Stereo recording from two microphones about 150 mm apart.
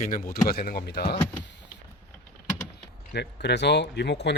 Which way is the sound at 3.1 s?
90° left.